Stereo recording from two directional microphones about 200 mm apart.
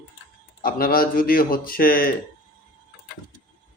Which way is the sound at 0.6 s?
45° left (ahead or behind).